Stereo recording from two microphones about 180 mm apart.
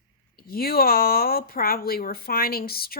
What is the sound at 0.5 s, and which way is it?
Speech, 55° left (ahead or behind).